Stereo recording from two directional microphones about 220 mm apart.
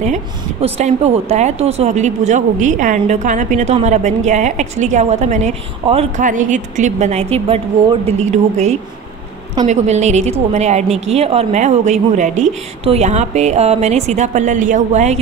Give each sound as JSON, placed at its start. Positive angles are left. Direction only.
{"t": 0.0, "sound": "speech", "side_deg": -30}